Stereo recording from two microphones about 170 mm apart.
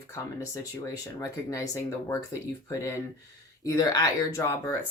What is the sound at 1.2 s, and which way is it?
Speech, 20° left (ahead or behind).